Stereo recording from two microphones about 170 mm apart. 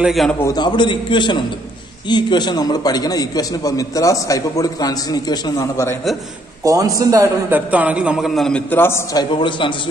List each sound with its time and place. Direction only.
0.0 s a man's voice: centre (ahead or behind)
0.4 s a man's voice: 20° left (ahead or behind)
6.6 s a man's voice: 20° right (ahead or behind)
7.7 s a man's voice: 10° right (ahead or behind); by 9.8 s 30° left (ahead or behind)